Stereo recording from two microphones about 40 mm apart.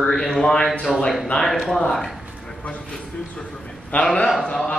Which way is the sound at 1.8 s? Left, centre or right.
Centre.